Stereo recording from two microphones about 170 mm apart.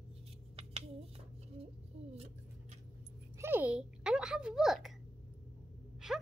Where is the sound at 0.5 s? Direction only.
35° right (ahead or behind).